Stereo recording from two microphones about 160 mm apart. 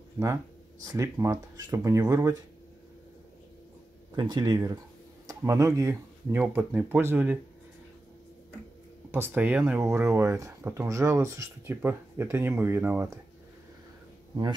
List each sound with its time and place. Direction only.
0.2 s speech: 20° right (ahead or behind)
4.2 s speech: 25° right (ahead or behind)
9.1 s speech: 10° right (ahead or behind)